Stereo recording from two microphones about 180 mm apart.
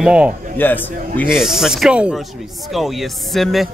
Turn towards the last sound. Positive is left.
turn(degrees=0)  # may be behind; listen again after turning